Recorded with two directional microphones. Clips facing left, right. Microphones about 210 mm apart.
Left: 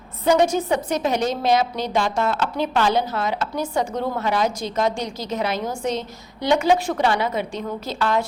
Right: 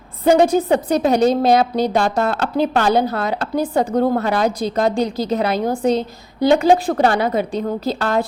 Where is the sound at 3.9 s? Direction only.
55° right (ahead or behind).